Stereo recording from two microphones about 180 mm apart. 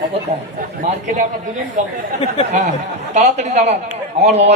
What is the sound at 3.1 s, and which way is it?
Speech, 40° right (ahead or behind).